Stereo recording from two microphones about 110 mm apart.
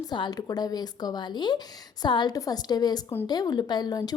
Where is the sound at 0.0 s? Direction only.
40° left (ahead or behind).